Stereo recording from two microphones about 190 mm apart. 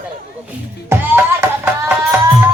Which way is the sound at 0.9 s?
10° right (ahead or behind).